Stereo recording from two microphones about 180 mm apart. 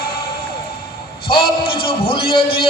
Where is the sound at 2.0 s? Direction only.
30° left (ahead or behind).